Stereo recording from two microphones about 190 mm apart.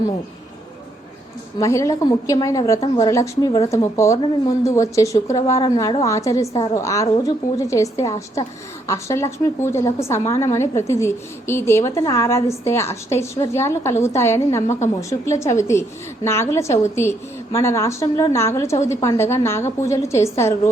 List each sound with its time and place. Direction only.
1.5 s a woman's voice: 15° left (ahead or behind)